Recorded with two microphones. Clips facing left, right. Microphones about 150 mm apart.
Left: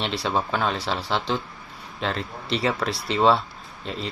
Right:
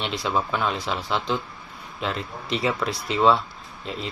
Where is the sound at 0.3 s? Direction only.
35° left (ahead or behind).